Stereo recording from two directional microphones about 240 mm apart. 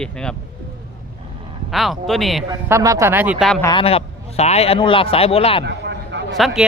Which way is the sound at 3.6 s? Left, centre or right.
Centre.